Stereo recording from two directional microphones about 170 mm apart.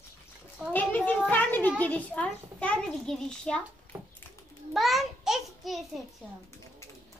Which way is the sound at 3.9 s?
15° right (ahead or behind).